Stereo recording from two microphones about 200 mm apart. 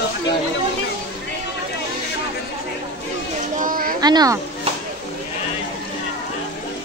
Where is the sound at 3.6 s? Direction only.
45° right (ahead or behind).